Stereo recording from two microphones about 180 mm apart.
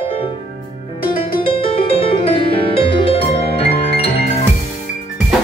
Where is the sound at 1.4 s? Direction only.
30° left (ahead or behind).